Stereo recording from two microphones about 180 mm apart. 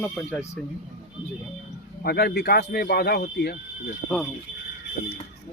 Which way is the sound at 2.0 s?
60° left (ahead or behind).